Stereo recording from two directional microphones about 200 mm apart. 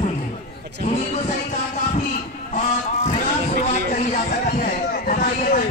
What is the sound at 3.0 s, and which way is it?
Speech, 40° left (ahead or behind).